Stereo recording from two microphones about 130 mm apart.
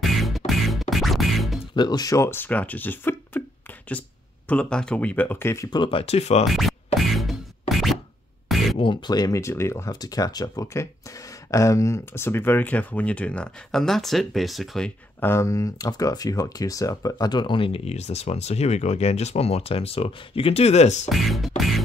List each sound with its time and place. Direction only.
0.0 s beatboxing: centre (ahead or behind)
0.5 s music: centre (ahead or behind)
1.8 s speech: 30° left (ahead or behind); by 3.4 s 15° left (ahead or behind)
4.5 s speech: 10° left (ahead or behind)
5.7 s speech: 40° left (ahead or behind)
6.4 s speech: centre (ahead or behind)
7.0 s music: centre (ahead or behind)
8.5 s a sound: centre (ahead or behind)
8.7 s speech: 40° left (ahead or behind); by 14.9 s centre (ahead or behind)
15.1 s speech: 20° left (ahead or behind); by 21.1 s 60° left (ahead or behind)
21.1 s speech: centre (ahead or behind)